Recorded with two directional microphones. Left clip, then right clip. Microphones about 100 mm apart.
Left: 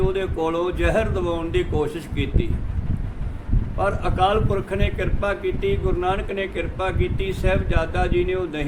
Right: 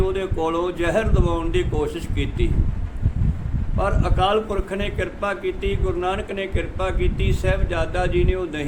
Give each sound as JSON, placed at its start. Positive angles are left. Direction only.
{"t": 0.0, "sound": "speech", "side_deg": -15}
{"t": 3.8, "sound": "a man's voice", "side_deg": -20}